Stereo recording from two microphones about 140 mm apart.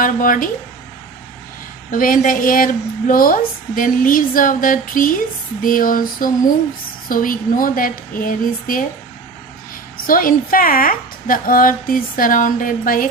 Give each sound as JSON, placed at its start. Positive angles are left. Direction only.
{"t": 0.0, "sound": "a woman's voice", "side_deg": 80}
{"t": 1.9, "sound": "a woman's voice", "side_deg": 80}
{"t": 10.1, "sound": "a woman's voice", "side_deg": 90}